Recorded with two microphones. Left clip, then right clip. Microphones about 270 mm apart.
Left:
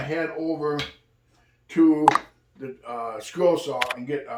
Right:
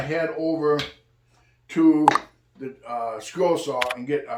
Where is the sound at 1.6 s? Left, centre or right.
Centre.